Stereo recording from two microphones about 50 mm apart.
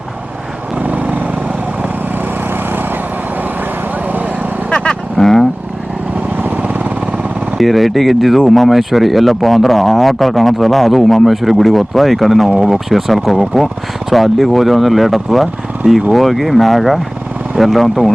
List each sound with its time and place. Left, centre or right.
0.8 s vehicle: right
4.7 s vehicle: centre
6.3 s vehicle: right
7.6 s speech: centre
12.5 s speech: centre